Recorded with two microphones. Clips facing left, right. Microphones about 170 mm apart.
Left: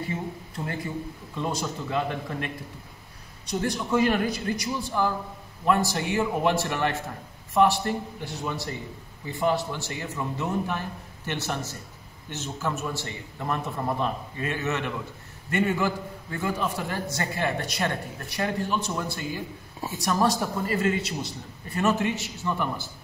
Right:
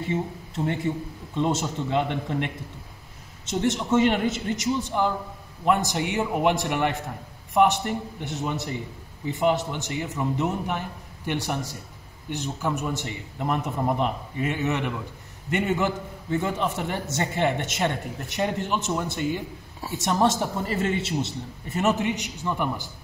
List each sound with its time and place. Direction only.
1.3 s a man's voice: 25° right (ahead or behind)